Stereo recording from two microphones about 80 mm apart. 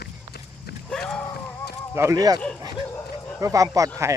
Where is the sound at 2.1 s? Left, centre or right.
Right.